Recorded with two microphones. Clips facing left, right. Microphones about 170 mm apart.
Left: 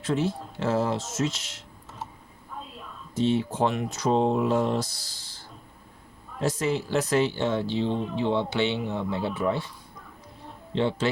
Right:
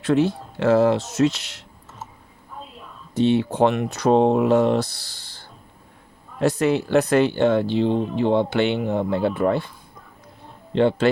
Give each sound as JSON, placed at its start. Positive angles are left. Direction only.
{"t": 0.0, "sound": "speech", "side_deg": -65}
{"t": 3.2, "sound": "speech", "side_deg": -65}
{"t": 10.8, "sound": "speech", "side_deg": -55}